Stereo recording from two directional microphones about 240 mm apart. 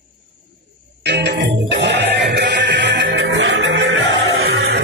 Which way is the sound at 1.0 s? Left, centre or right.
Right.